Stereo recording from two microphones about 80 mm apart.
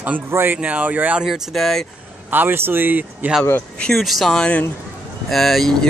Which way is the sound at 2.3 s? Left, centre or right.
Right.